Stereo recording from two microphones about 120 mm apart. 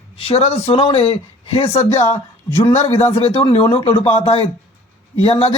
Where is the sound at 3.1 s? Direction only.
50° left (ahead or behind).